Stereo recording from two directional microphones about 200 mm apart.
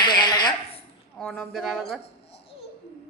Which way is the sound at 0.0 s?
20° left (ahead or behind).